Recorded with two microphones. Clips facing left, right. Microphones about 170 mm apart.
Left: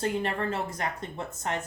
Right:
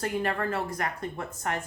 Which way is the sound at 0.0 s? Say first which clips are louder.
Even; 25° left (ahead or behind).